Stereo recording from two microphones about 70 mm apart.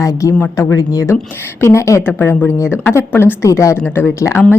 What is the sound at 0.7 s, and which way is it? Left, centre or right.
Speech, left.